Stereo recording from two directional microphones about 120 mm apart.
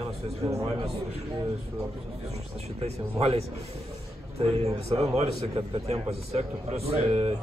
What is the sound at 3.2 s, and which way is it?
A man's voice, 60° right (ahead or behind).